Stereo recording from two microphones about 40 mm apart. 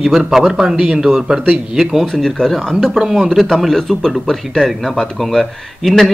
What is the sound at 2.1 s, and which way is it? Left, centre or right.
Speech, centre.